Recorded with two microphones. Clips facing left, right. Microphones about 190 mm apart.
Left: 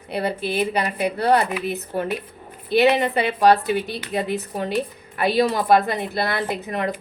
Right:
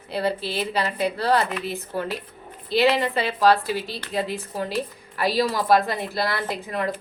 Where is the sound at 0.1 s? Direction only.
20° left (ahead or behind).